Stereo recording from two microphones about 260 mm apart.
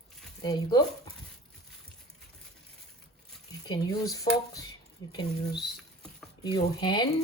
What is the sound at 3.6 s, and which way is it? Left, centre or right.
Speech, centre.